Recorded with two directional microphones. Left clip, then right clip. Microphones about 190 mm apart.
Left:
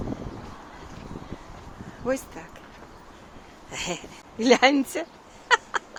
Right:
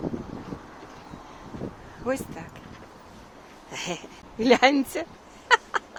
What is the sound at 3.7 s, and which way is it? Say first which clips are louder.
Speech: left 1 dB; 5° left (ahead or behind).